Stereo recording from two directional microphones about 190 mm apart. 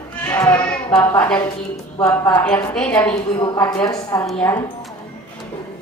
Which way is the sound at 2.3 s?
5° left (ahead or behind).